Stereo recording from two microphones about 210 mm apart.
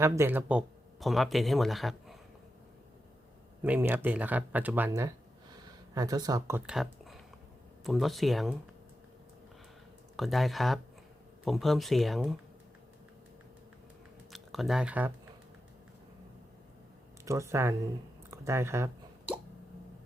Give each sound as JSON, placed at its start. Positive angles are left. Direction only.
{"t": 0.0, "sound": "speech", "side_deg": -10}
{"t": 3.6, "sound": "speech", "side_deg": -10}
{"t": 6.7, "sound": "a sound", "side_deg": 0}
{"t": 7.9, "sound": "speech", "side_deg": 0}
{"t": 10.2, "sound": "speech", "side_deg": 0}
{"t": 14.3, "sound": "speech", "side_deg": 0}
{"t": 17.2, "sound": "speech", "side_deg": -15}